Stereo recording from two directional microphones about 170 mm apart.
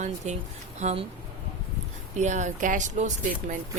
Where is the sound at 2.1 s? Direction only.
45° right (ahead or behind).